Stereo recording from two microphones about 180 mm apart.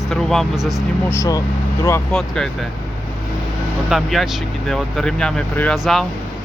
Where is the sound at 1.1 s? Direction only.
15° left (ahead or behind).